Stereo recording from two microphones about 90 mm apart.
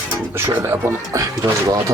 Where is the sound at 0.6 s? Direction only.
30° right (ahead or behind).